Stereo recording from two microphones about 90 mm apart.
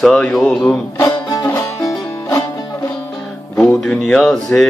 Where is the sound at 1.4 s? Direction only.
35° left (ahead or behind).